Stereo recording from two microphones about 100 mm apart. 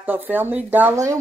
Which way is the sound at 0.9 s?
35° right (ahead or behind).